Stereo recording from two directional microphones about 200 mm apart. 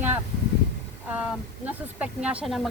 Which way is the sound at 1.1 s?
5° right (ahead or behind).